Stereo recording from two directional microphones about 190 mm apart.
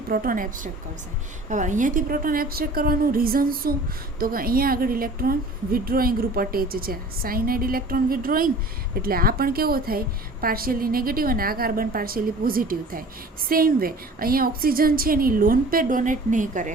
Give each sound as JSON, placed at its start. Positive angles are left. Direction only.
{"t": 0.1, "sound": "a woman's voice", "side_deg": -45}